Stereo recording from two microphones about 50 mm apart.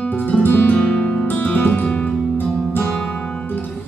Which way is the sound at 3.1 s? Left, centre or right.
Left.